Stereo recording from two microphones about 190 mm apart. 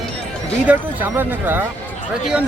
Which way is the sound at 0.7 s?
10° right (ahead or behind).